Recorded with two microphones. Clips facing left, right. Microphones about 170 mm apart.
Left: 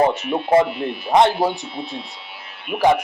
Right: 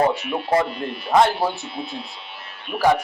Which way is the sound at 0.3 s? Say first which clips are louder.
Left 7 dB; 20° left (ahead or behind).